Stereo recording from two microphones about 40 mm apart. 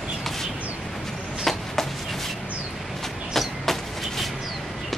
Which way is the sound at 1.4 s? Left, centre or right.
Centre.